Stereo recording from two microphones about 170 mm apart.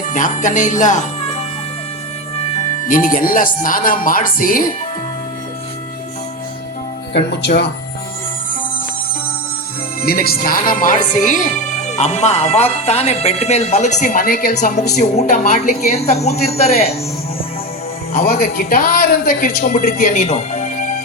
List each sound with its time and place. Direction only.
0.1 s speech: 50° left (ahead or behind)
2.8 s speech: 50° left (ahead or behind)
7.1 s speech: 85° left
10.0 s speech: 60° left (ahead or behind); by 16.9 s 40° left (ahead or behind)
18.1 s speech: 60° left (ahead or behind)
20.2 s music: 40° left (ahead or behind)